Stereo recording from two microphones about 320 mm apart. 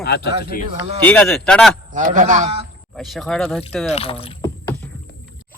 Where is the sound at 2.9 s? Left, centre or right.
Centre.